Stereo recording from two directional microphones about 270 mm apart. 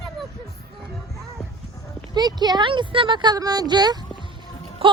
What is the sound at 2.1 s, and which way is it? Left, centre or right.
Speech, centre.